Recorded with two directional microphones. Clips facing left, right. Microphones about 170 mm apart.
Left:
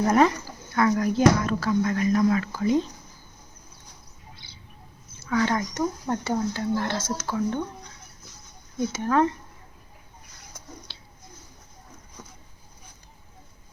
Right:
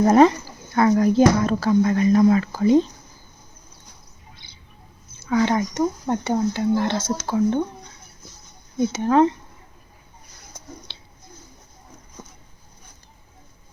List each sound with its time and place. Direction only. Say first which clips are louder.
0.0 s speech: right 6 dB; 30° right (ahead or behind)
5.3 s speech: right 4 dB; 20° right (ahead or behind)
8.8 s speech: right 5 dB; 20° right (ahead or behind)
10.9 s a sound: right 2 dB; 20° right (ahead or behind)